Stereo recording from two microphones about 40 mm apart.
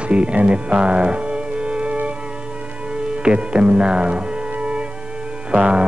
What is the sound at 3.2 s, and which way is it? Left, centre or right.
Music, right.